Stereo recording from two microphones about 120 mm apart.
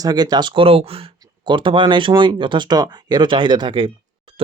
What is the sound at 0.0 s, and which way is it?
Speech, 35° right (ahead or behind).